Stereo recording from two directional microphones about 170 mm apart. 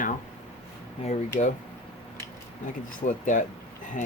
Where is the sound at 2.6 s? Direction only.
50° left (ahead or behind).